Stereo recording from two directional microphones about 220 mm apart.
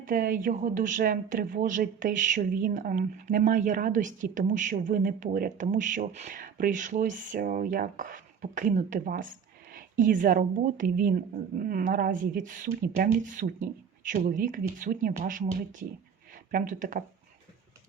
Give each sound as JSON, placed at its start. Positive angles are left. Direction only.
{"t": 0.0, "sound": "speech", "side_deg": -40}